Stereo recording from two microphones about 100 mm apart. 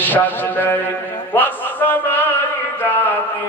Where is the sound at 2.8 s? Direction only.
20° left (ahead or behind).